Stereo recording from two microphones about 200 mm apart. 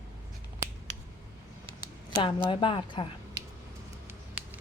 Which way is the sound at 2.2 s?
25° left (ahead or behind).